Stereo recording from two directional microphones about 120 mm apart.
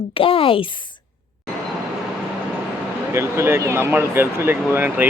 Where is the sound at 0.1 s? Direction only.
50° left (ahead or behind).